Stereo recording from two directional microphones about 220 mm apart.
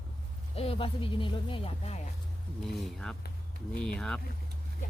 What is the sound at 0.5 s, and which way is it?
Speech, 25° left (ahead or behind).